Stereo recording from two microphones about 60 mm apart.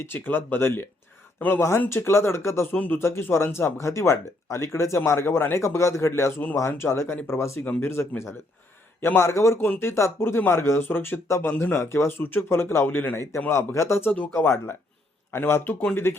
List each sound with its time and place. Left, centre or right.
0.0 s speech: left
2.7 s a man's voice: left
3.0 s speech: left
11.3 s speech: left
11.5 s speech: left
11.8 s speech: left
14.1 s speech: left